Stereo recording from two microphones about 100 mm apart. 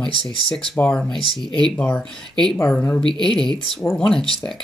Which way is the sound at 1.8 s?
15° left (ahead or behind).